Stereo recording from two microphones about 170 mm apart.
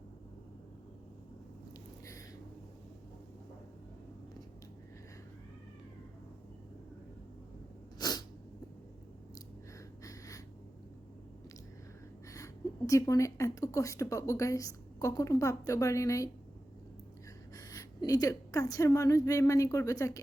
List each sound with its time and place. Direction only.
7.9 s sneeze: 25° left (ahead or behind)
10.0 s snort: 20° left (ahead or behind)
12.3 s a woman's voice: 20° left (ahead or behind)
17.5 s speech: 20° left (ahead or behind)